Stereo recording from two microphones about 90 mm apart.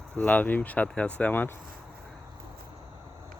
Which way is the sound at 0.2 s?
15° left (ahead or behind).